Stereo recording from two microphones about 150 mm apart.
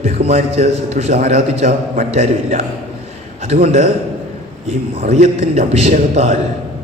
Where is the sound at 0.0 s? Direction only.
45° right (ahead or behind).